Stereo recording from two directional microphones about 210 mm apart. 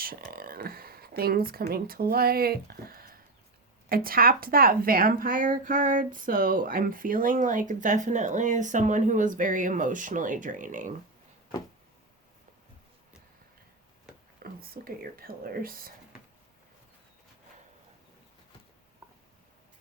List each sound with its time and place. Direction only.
0.0 s speech: 45° right (ahead or behind)
14.3 s speech: 45° right (ahead or behind)